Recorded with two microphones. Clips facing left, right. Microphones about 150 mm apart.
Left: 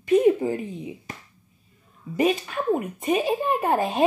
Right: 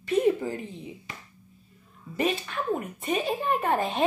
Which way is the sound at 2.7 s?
20° left (ahead or behind).